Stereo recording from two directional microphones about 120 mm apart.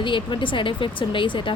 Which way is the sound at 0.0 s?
45° left (ahead or behind).